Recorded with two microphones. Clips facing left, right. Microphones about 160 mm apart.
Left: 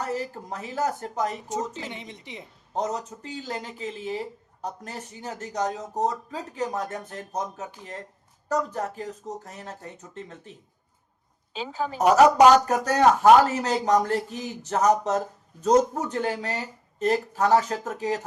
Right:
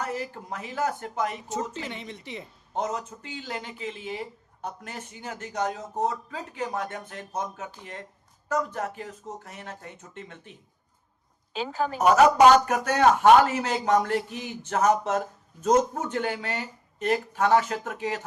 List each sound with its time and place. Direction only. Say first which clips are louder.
0.0 s speech: left 2 dB; 35° left (ahead or behind)
1.7 s a woman's voice: right 1 dB; 15° left (ahead or behind)
2.7 s speech: left 1 dB; 40° left (ahead or behind)
11.9 s speech: left 1 dB; 40° left (ahead or behind)